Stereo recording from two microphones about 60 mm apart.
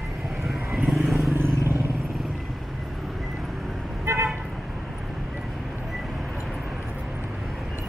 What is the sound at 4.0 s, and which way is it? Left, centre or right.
Toot, right.